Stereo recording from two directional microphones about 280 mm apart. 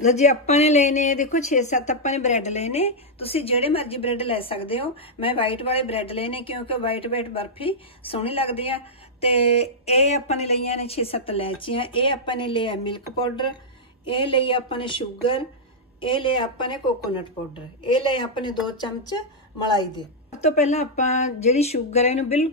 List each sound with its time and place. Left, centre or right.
0.0 s speech: left
17.8 s speech: centre